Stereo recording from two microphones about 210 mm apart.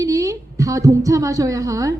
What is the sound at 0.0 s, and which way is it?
A woman's voice, 15° right (ahead or behind).